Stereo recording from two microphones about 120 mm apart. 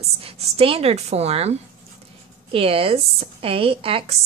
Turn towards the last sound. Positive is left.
turn(degrees=-50)  # may be behind; listen again after turning